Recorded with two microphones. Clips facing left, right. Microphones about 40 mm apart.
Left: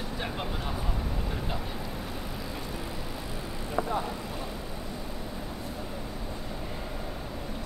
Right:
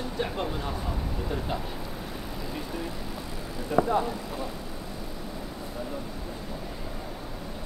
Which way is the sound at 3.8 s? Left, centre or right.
Right.